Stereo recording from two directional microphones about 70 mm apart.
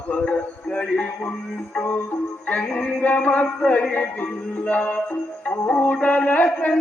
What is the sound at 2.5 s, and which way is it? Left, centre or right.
Music, centre.